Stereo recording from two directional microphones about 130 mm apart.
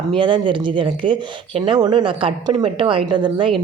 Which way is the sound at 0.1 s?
40° right (ahead or behind).